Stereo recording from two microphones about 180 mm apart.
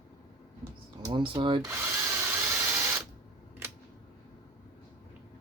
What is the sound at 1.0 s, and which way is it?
Speech, 25° right (ahead or behind).